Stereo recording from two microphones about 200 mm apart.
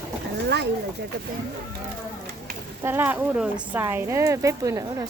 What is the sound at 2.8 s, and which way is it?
Speech, 10° right (ahead or behind).